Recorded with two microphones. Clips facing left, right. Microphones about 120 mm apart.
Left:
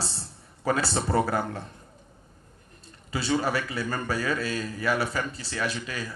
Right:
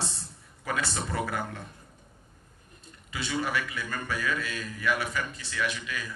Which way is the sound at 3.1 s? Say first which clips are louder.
Left 5 dB; 35° left (ahead or behind).